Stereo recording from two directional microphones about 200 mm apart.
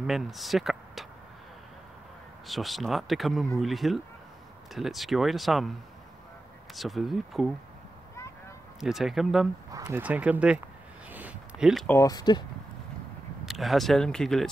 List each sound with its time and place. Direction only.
0.0 s speech: centre (ahead or behind)
2.4 s speech: centre (ahead or behind)
6.7 s speech: centre (ahead or behind)
8.7 s speech: centre (ahead or behind)
9.7 s speech: 15° right (ahead or behind)
11.1 s a sound: 10° right (ahead or behind)
11.9 s speech: 15° left (ahead or behind)
13.5 s speech: centre (ahead or behind)